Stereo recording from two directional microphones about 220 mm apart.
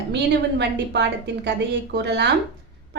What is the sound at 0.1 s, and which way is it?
A woman's voice, 50° right (ahead or behind).